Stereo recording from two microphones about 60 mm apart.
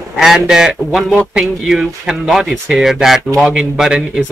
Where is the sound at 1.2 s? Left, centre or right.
Centre.